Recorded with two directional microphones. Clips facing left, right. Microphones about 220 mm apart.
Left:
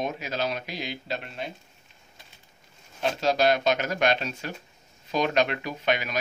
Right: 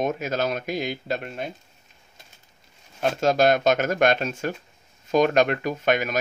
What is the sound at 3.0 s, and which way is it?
Speech, 50° right (ahead or behind).